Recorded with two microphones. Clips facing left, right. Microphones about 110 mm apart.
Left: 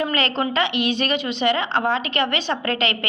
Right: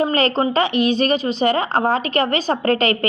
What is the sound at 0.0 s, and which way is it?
A woman's voice, 40° right (ahead or behind).